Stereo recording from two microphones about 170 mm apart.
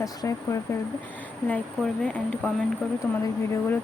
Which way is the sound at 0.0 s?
20° left (ahead or behind).